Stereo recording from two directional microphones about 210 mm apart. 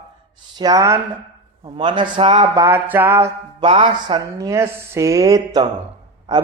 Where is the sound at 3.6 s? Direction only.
25° right (ahead or behind).